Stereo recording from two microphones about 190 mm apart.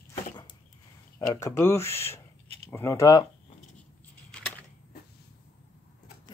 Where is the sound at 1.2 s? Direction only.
15° left (ahead or behind).